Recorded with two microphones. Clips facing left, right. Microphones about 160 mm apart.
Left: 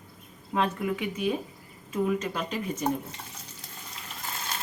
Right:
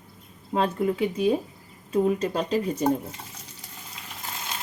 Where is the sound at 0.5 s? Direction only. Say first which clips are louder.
Right 4 dB; 30° right (ahead or behind).